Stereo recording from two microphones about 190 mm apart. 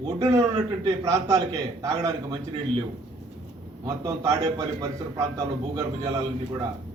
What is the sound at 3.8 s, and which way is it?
A man's voice, 15° right (ahead or behind).